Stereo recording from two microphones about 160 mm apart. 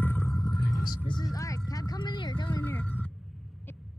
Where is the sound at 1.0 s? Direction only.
25° left (ahead or behind).